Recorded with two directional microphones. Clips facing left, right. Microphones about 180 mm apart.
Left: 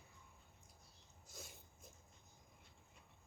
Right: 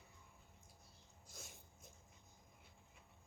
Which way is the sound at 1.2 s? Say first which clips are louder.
Left 2 dB; centre (ahead or behind).